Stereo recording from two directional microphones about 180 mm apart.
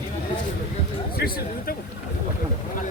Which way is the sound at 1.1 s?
55° left (ahead or behind).